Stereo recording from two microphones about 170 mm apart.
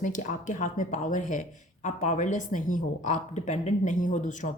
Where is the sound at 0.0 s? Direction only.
50° left (ahead or behind).